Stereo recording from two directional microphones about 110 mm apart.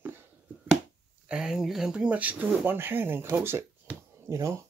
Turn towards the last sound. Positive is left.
turn(degrees=-25)  # may be behind; listen again after turning